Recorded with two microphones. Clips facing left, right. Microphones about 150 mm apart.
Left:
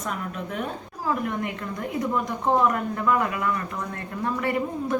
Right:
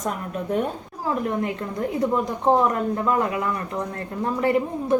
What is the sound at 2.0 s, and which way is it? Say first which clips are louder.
A woman's voice: right 3 dB; 30° right (ahead or behind).